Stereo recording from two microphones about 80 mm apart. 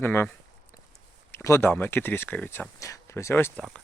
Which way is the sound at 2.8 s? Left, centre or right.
Left.